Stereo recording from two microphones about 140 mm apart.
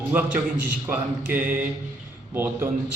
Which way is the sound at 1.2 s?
10° right (ahead or behind).